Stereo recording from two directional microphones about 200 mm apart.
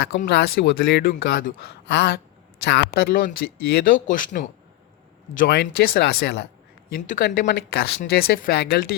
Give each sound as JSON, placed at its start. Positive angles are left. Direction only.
{"t": 0.3, "sound": "speech", "side_deg": 55}
{"t": 5.5, "sound": "speech", "side_deg": 50}